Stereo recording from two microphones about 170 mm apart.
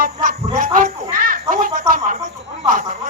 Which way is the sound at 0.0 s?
55° right (ahead or behind).